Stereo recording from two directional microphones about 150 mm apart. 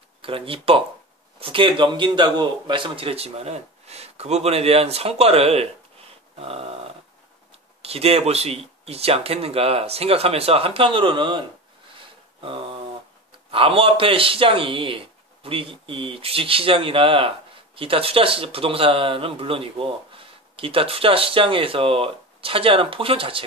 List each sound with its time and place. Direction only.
0.2 s speech: 40° right (ahead or behind)
6.4 s dog: 40° right (ahead or behind)
7.8 s speech: 40° right (ahead or behind)
12.4 s a sound: 35° right (ahead or behind)
13.5 s speech: 35° right (ahead or behind)